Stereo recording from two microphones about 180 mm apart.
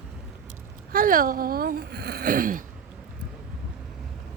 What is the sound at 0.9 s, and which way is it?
Speech, 50° right (ahead or behind).